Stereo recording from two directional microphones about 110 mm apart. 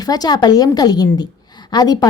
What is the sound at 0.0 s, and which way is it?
A woman's voice, 35° left (ahead or behind).